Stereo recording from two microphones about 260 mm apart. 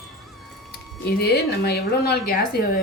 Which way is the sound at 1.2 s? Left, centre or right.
Left.